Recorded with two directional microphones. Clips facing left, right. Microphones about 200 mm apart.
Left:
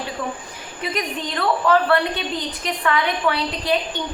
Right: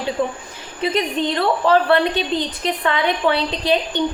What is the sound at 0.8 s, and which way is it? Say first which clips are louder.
A woman's voice: right 6 dB; 25° right (ahead or behind).